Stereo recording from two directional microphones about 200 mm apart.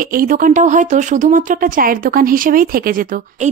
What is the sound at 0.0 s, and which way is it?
Speech, 45° right (ahead or behind).